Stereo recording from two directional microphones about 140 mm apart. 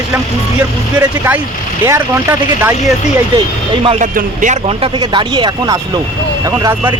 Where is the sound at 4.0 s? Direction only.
70° right (ahead or behind).